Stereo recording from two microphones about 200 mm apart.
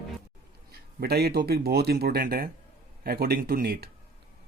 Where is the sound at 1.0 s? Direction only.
50° right (ahead or behind).